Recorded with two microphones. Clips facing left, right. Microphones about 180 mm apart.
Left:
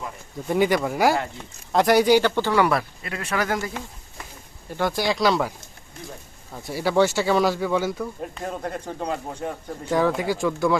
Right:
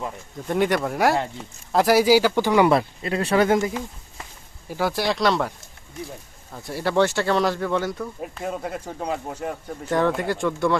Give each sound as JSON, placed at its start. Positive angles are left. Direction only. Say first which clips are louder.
{"t": 0.4, "sound": "speech", "louder": "left 1 dB", "side_deg": 0}
{"t": 4.7, "sound": "speech", "louder": "even", "side_deg": -5}